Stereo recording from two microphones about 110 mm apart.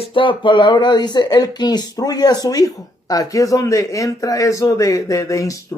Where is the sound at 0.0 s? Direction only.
50° left (ahead or behind).